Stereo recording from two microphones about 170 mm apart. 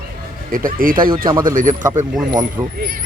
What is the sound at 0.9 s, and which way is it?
Speech, 30° right (ahead or behind).